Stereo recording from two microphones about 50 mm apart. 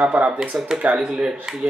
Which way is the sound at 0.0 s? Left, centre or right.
Right.